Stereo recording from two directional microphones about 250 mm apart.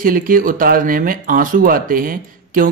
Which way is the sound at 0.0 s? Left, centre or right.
Right.